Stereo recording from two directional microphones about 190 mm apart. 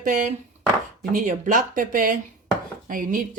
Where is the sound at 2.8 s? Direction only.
45° right (ahead or behind).